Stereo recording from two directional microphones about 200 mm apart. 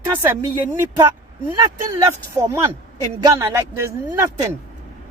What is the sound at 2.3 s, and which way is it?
Speech, 15° right (ahead or behind).